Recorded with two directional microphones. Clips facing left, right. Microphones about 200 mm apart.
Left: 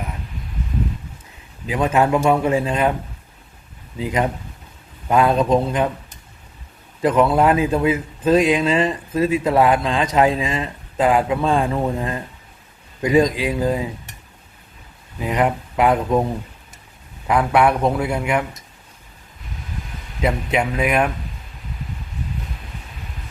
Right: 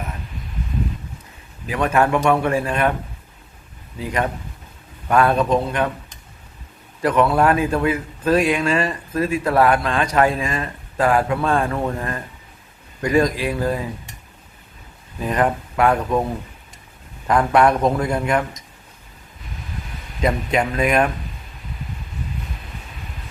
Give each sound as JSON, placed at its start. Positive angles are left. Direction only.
{"t": 1.6, "sound": "a man's voice", "side_deg": 20}
{"t": 3.9, "sound": "a man's voice", "side_deg": 20}
{"t": 7.0, "sound": "a man's voice", "side_deg": 20}
{"t": 15.2, "sound": "speech", "side_deg": 15}
{"t": 17.2, "sound": "speech", "side_deg": 10}
{"t": 20.2, "sound": "speech", "side_deg": 10}